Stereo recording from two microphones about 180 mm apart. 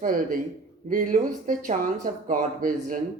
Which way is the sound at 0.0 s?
50° right (ahead or behind).